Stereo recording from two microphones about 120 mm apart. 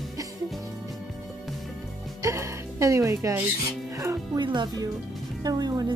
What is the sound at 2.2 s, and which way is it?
Music, 25° right (ahead or behind).